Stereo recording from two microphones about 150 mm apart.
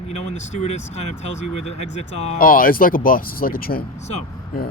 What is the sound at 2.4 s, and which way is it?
Speech, 70° left (ahead or behind).